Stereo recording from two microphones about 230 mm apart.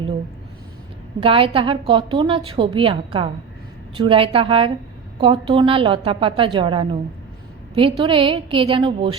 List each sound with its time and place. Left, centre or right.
1.2 s a woman's voice: right